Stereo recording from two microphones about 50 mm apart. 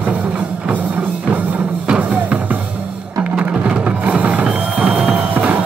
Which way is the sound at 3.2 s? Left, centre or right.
Right.